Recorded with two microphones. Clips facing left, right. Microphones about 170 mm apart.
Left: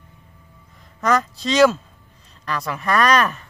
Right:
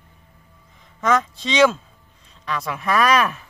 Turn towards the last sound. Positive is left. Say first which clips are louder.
# even
turn(degrees=0)  # may be behind; listen again after turning